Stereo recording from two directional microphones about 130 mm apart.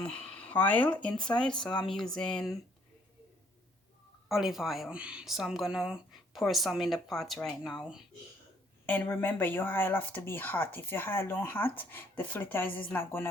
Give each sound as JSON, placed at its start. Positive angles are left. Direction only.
{"t": 0.0, "sound": "speech", "side_deg": 10}
{"t": 4.3, "sound": "speech", "side_deg": 0}
{"t": 8.9, "sound": "speech", "side_deg": 15}